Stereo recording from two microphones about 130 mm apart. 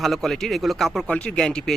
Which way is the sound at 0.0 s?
Centre (ahead or behind).